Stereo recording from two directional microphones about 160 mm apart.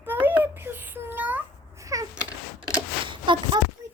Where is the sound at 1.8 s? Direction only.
20° right (ahead or behind).